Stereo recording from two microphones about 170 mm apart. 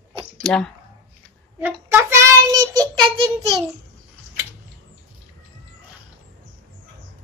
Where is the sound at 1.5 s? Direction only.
10° right (ahead or behind).